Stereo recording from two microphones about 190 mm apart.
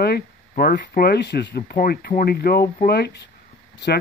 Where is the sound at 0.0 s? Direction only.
55° left (ahead or behind).